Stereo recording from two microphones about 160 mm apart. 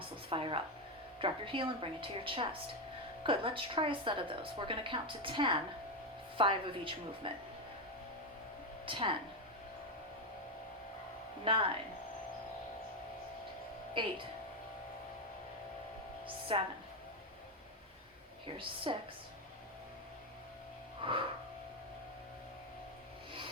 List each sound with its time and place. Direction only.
0.3 s a woman's voice: 35° right (ahead or behind)
8.9 s a woman's voice: 35° right (ahead or behind)
11.4 s a woman's voice: 30° right (ahead or behind)
13.9 s a woman's voice: 30° right (ahead or behind)
16.5 s a woman's voice: 35° right (ahead or behind)
18.4 s a woman's voice: 30° right (ahead or behind)
21.0 s wheeze: 35° right (ahead or behind)